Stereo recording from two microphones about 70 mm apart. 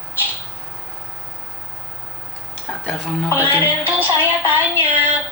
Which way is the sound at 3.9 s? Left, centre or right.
Right.